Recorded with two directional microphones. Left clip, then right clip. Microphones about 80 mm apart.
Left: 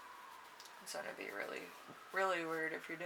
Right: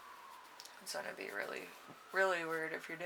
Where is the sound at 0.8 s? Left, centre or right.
Right.